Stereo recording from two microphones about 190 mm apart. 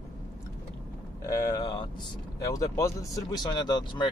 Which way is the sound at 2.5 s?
15° left (ahead or behind).